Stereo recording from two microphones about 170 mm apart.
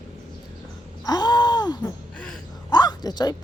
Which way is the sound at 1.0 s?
25° left (ahead or behind).